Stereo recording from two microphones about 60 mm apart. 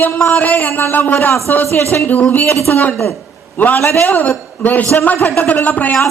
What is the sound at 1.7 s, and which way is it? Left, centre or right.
Speech, left.